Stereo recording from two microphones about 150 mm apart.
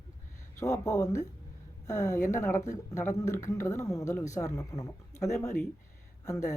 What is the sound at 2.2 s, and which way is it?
Speech, 55° left (ahead or behind).